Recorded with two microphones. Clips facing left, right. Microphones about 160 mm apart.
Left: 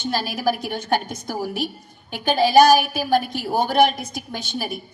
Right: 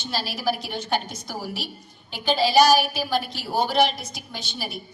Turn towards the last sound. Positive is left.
turn(degrees=50)  # may be behind; listen again after turning